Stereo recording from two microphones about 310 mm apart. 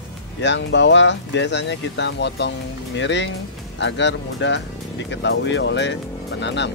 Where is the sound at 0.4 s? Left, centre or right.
Left.